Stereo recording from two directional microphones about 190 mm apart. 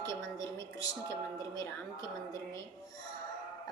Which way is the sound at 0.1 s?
15° left (ahead or behind).